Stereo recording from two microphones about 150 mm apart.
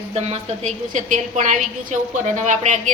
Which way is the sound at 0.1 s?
45° right (ahead or behind).